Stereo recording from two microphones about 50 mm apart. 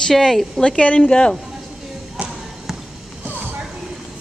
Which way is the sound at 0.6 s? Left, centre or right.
Left.